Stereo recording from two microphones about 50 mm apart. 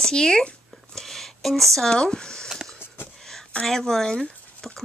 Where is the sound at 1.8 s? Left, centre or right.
Centre.